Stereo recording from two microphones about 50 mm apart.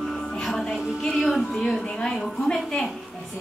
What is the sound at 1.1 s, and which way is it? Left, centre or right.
Speech, centre.